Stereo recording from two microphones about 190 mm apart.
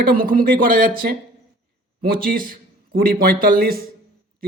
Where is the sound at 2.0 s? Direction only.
50° right (ahead or behind).